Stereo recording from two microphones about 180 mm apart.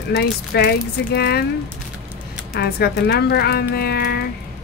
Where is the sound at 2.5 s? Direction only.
65° left (ahead or behind).